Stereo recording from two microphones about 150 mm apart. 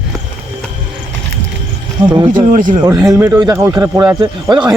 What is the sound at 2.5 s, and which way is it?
Speech, 65° right (ahead or behind).